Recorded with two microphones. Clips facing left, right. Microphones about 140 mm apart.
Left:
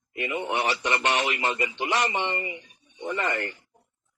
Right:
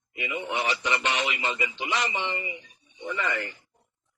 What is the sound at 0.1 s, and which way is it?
A man's voice, 55° left (ahead or behind).